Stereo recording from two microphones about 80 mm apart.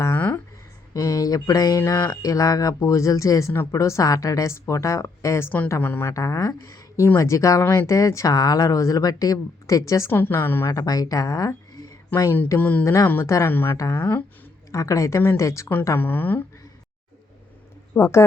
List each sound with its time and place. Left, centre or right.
0.9 s speech: left
1.8 s a woman's voice: left
2.2 s speech: left
5.8 s a woman's voice: left
6.1 s speech: left
10.1 s a woman's voice: left
10.7 s speech: left
12.5 s a woman's voice: left
12.8 s speech: left
13.5 s a woman's voice: left
13.7 s speech: left
16.0 s a woman's voice: left
17.9 s speech: left